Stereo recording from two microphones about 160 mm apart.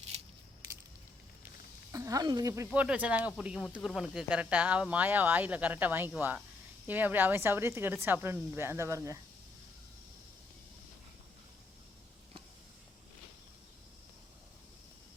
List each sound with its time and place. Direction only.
1.9 s speech: 20° right (ahead or behind)
2.6 s speech: 5° right (ahead or behind)